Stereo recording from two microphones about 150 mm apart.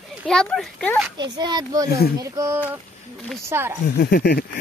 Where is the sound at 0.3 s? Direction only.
5° left (ahead or behind).